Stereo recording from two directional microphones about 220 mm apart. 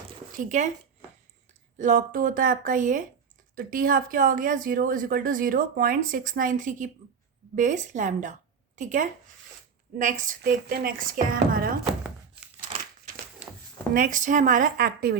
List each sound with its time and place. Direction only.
0.3 s speech: 35° right (ahead or behind)
1.8 s a woman's voice: 35° right (ahead or behind)
13.9 s speech: 35° right (ahead or behind)